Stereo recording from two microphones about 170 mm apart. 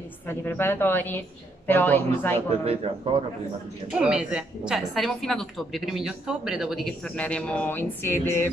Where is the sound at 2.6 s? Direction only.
35° right (ahead or behind).